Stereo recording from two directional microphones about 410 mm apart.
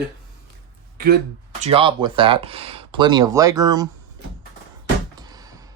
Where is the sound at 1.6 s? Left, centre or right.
Centre.